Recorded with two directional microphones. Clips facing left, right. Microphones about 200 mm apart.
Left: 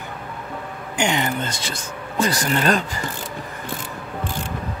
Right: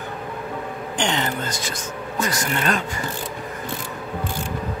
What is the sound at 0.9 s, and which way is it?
Speech, 10° left (ahead or behind).